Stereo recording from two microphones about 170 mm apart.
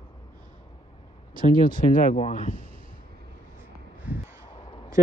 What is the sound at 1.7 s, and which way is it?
Speech, 55° left (ahead or behind).